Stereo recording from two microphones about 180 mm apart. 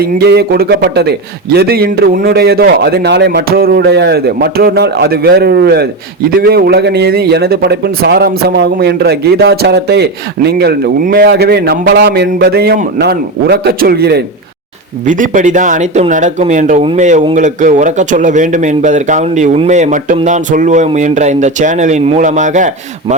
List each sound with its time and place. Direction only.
0.0 s speech: 60° right (ahead or behind)
15.0 s speech: 45° right (ahead or behind)